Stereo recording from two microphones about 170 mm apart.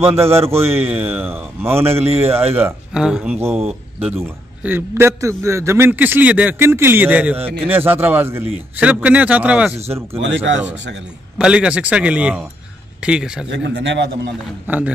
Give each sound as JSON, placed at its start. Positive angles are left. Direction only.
{"t": 0.0, "sound": "speech", "side_deg": -15}
{"t": 1.9, "sound": "a man's voice", "side_deg": -35}
{"t": 2.1, "sound": "speech", "side_deg": -15}
{"t": 10.2, "sound": "a man's voice", "side_deg": -90}
{"t": 11.3, "sound": "a man's voice", "side_deg": -5}
{"t": 13.5, "sound": "a man's voice", "side_deg": -90}
{"t": 14.7, "sound": "speech", "side_deg": -10}